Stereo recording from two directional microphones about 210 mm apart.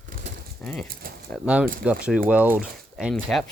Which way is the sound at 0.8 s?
45° right (ahead or behind).